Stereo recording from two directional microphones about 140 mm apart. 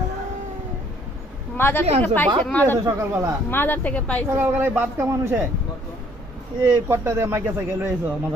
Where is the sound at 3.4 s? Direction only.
15° left (ahead or behind).